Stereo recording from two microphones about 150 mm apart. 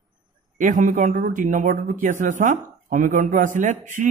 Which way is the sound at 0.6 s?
60° right (ahead or behind).